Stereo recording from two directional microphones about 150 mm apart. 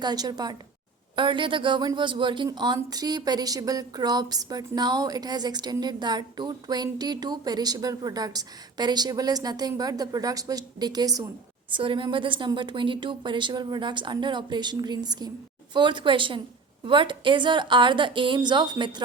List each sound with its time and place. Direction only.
0.0 s a woman's voice: 30° right (ahead or behind)